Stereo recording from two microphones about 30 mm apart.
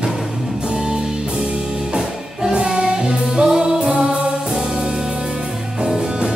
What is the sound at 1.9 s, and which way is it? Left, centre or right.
Music, right.